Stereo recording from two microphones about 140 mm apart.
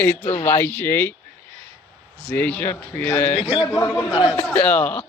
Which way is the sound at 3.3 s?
45° left (ahead or behind).